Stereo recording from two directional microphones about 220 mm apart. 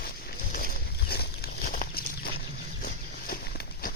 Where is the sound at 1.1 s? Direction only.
45° left (ahead or behind).